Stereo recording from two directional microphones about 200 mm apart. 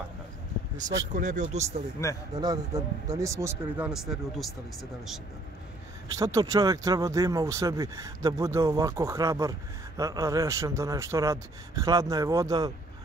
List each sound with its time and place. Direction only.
1.1 s speech: 40° right (ahead or behind)
2.0 s speech: 15° left (ahead or behind)
2.3 s speech: 20° right (ahead or behind); by 4.6 s centre (ahead or behind)
6.1 s speech: 15° right (ahead or behind)